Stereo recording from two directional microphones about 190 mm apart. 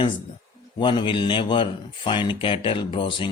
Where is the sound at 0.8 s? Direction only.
25° left (ahead or behind).